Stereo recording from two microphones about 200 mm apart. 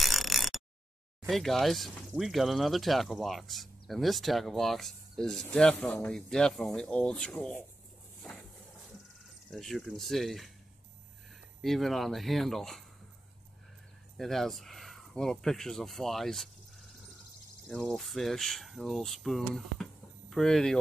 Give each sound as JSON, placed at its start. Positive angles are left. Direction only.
{"t": 0.0, "sound": "a sound", "side_deg": 0}
{"t": 1.2, "sound": "speech", "side_deg": 0}
{"t": 8.2, "sound": "a sound", "side_deg": 0}
{"t": 9.5, "sound": "speech", "side_deg": 0}
{"t": 11.6, "sound": "speech", "side_deg": 0}
{"t": 14.1, "sound": "speech", "side_deg": 0}
{"t": 17.6, "sound": "speech", "side_deg": 5}